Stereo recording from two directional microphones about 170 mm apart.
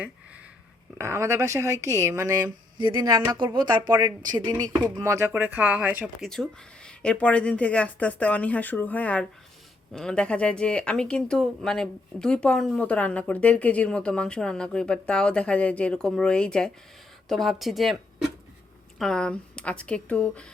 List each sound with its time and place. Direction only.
0.9 s speech: 15° right (ahead or behind)
6.2 s speech: centre (ahead or behind)